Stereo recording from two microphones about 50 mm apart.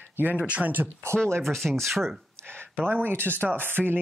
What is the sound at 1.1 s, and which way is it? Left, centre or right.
Speech, right.